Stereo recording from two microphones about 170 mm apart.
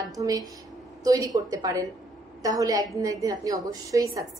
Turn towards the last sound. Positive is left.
turn(degrees=-20)  # may be behind; listen again after turning